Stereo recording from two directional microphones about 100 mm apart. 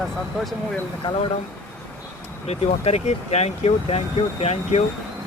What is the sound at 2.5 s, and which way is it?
Speech, 90° left.